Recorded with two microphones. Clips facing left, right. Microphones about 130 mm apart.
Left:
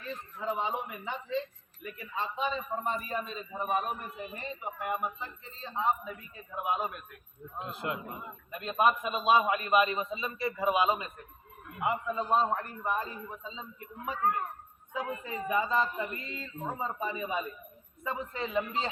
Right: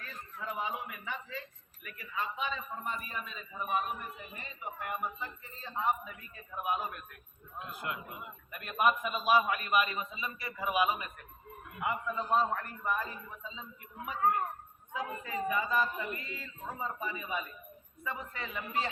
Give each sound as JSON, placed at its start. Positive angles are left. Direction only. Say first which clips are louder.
{"t": 0.0, "sound": "a man's voice", "louder": "left 6 dB", "side_deg": 25}
{"t": 4.8, "sound": "a man's voice", "louder": "left 3 dB", "side_deg": 20}